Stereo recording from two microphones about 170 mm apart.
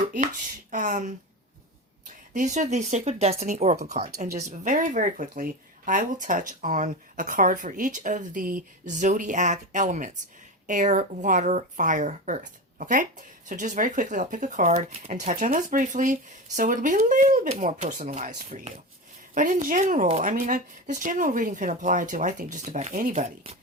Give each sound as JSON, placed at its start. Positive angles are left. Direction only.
{"t": 0.7, "sound": "speech", "side_deg": -50}